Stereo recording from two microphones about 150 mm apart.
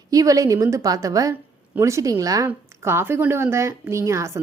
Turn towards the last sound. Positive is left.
turn(degrees=-20)  # may be behind; listen again after turning